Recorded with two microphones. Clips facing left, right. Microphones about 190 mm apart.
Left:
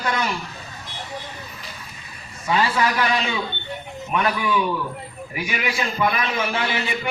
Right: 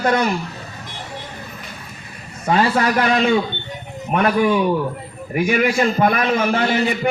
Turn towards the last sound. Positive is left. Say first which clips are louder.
# right 7 dB
turn(degrees=-50)  # may be behind; listen again after turning